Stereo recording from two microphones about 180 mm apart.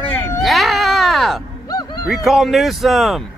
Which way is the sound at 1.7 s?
20° left (ahead or behind).